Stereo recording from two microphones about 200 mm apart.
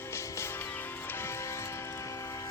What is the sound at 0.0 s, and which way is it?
Music, 15° left (ahead or behind).